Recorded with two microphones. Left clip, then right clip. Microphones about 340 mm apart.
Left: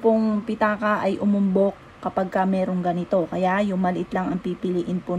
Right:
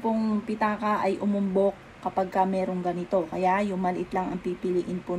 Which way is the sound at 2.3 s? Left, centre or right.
Left.